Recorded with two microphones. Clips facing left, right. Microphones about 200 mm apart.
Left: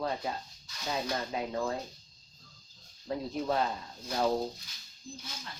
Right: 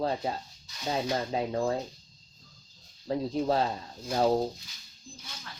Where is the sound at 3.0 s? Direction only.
30° right (ahead or behind).